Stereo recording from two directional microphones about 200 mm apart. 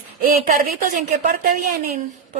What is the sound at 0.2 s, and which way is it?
A woman's voice, 45° right (ahead or behind).